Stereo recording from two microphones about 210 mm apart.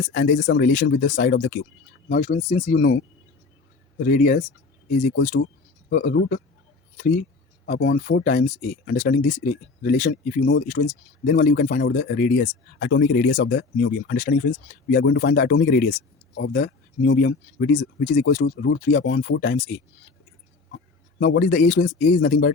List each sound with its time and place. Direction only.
0.0 s speech: 40° left (ahead or behind)
2.2 s speech: 30° left (ahead or behind)
4.0 s speech: 40° left (ahead or behind)
6.1 s speech: 50° left (ahead or behind)
6.9 s speech: 40° left (ahead or behind)
10.7 s speech: 35° left (ahead or behind)
20.7 s a sound: 50° left (ahead or behind)
21.9 s speech: 40° left (ahead or behind)